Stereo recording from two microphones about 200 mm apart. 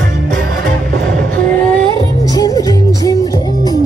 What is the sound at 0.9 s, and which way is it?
Music, 45° right (ahead or behind).